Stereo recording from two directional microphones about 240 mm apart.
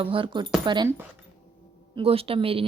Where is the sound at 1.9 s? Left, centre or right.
Right.